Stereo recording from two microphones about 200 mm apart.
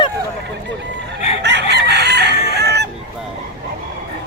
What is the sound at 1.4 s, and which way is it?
Chicken, 55° right (ahead or behind).